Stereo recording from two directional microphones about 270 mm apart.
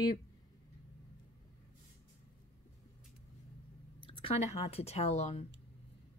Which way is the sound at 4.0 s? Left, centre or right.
Centre.